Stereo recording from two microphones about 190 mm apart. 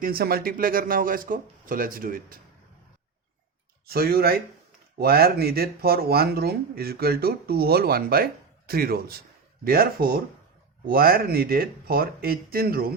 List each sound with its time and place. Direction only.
0.0 s speech: 50° right (ahead or behind)
3.8 s speech: 55° right (ahead or behind)